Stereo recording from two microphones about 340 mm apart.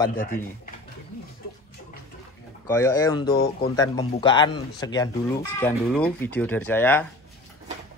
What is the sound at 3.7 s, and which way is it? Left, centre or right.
Speech, centre.